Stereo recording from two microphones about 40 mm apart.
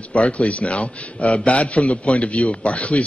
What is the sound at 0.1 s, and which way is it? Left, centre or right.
A man's voice, left.